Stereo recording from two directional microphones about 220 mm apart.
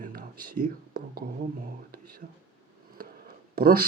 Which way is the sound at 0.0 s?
40° right (ahead or behind).